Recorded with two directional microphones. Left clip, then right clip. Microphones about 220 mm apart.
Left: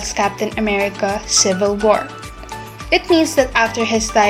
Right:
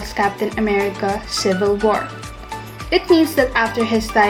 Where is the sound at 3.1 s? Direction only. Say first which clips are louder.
Even; 20° left (ahead or behind).